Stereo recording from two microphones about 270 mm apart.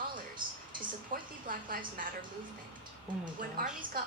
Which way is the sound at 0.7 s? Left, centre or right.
Right.